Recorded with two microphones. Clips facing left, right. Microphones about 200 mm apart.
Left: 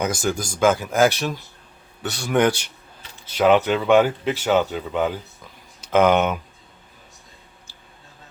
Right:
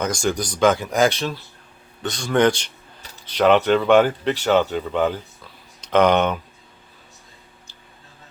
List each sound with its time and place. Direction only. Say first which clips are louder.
0.0 s speech: right 1 dB; 5° left (ahead or behind)